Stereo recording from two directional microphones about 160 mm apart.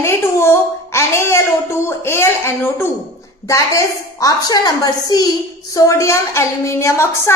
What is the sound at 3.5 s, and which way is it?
A woman's voice, 20° left (ahead or behind).